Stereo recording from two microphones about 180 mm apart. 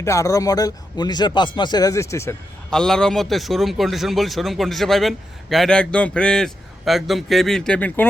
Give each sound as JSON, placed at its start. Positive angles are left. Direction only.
{"t": 0.0, "sound": "a man's voice", "side_deg": 15}
{"t": 2.6, "sound": "a man's voice", "side_deg": 5}